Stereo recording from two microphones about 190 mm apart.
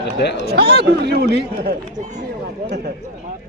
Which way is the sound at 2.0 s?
40° right (ahead or behind).